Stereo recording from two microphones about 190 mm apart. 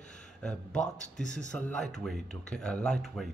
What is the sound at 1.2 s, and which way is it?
Speech, 40° left (ahead or behind).